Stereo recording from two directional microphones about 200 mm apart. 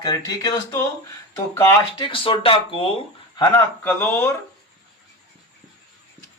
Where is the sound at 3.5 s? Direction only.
10° left (ahead or behind).